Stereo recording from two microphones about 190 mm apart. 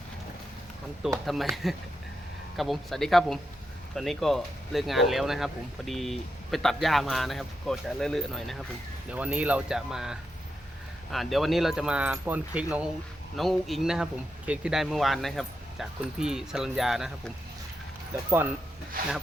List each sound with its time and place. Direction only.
1.2 s speech: centre (ahead or behind)
2.6 s speech: centre (ahead or behind)
19.0 s speech: 50° right (ahead or behind)